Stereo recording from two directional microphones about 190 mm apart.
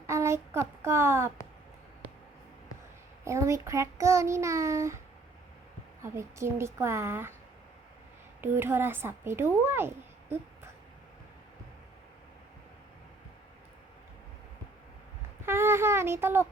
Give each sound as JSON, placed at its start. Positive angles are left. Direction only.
{"t": 0.1, "sound": "a sound", "side_deg": -15}
{"t": 3.2, "sound": "a child's voice", "side_deg": -15}
{"t": 6.0, "sound": "a child's voice", "side_deg": -15}
{"t": 8.4, "sound": "speech", "side_deg": -10}
{"t": 15.4, "sound": "child singing", "side_deg": -15}